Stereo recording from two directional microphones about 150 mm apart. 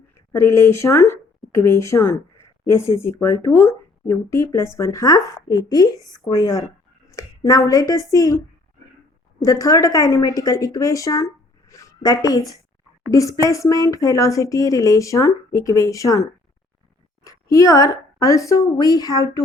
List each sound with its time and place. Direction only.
0.3 s a woman's voice: 20° left (ahead or behind)
17.2 s a sound: 20° left (ahead or behind)
18.2 s speech: 20° left (ahead or behind)